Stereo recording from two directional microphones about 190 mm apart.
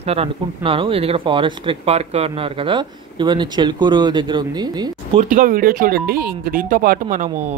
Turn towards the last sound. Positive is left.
turn(degrees=-40)  # may be behind; listen again after turning